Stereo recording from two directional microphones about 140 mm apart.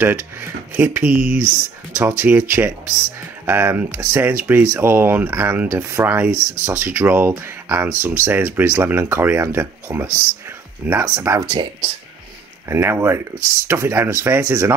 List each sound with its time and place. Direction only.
0.7 s speech: 15° right (ahead or behind)
12.6 s speech: 15° right (ahead or behind)